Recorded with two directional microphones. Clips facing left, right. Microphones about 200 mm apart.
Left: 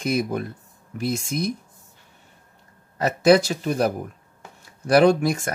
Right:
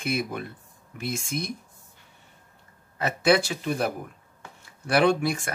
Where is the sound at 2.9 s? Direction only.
40° left (ahead or behind).